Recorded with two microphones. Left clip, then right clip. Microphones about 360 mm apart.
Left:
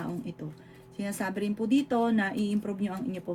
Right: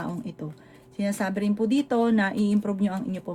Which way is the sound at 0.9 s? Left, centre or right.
Right.